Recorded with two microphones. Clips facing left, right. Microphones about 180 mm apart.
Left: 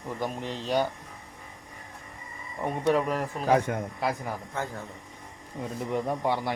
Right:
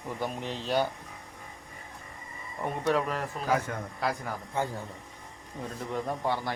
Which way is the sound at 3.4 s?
25° left (ahead or behind).